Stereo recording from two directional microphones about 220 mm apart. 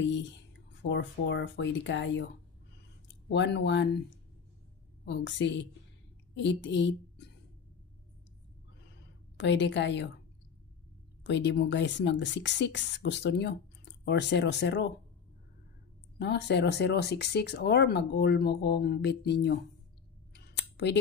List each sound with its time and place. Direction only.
0.0 s speech: 55° left (ahead or behind)
3.3 s speech: 55° left (ahead or behind)
5.0 s speech: 55° left (ahead or behind)
9.4 s speech: 55° left (ahead or behind)
11.2 s speech: 55° left (ahead or behind)
16.2 s speech: 50° left (ahead or behind)
20.3 s a sound: 50° left (ahead or behind)